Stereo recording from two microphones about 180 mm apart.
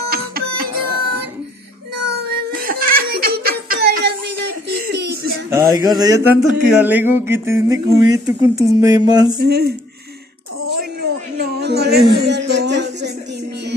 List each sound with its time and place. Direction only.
0.1 s music: 60° right (ahead or behind)
2.0 s crying: 60° right (ahead or behind)
4.6 s giggle: 65° right (ahead or behind)
5.5 s speech: 20° right (ahead or behind)
9.4 s speech: 60° right (ahead or behind)
11.3 s a sound: 65° right (ahead or behind)